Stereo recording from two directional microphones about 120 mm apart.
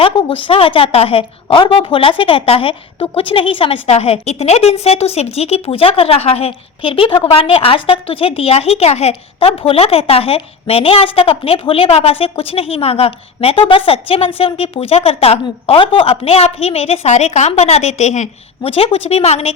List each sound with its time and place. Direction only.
0.0 s a woman's voice: 45° left (ahead or behind)